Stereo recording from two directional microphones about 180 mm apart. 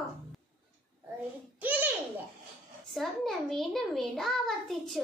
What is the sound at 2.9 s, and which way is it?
A child's voice, centre (ahead or behind).